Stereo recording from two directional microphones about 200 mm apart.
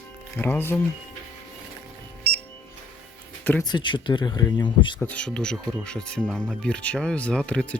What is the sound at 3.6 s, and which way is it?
Speech, 20° left (ahead or behind).